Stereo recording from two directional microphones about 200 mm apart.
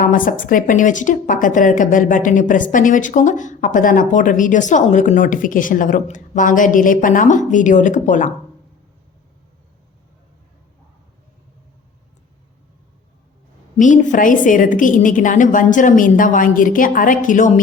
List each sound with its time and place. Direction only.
0.0 s a woman's voice: 40° left (ahead or behind)
13.7 s a woman's voice: 40° left (ahead or behind)